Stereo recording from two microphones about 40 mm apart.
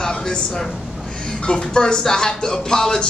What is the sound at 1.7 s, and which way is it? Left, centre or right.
A man's voice, centre.